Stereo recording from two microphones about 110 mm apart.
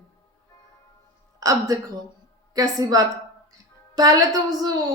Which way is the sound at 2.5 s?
35° right (ahead or behind).